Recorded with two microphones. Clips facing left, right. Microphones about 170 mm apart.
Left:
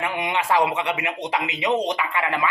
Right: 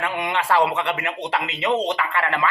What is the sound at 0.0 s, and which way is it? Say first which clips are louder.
Speech: even; 15° left (ahead or behind).